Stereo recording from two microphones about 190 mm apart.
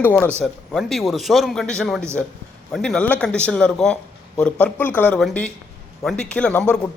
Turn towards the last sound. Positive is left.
turn(degrees=5)  # may be behind; listen again after turning